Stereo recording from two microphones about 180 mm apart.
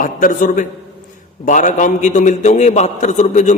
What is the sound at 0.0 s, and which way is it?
A man's voice, 50° left (ahead or behind).